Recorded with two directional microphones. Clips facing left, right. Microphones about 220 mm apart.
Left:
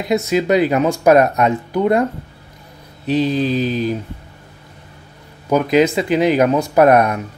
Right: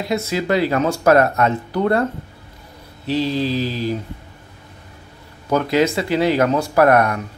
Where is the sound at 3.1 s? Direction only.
20° left (ahead or behind).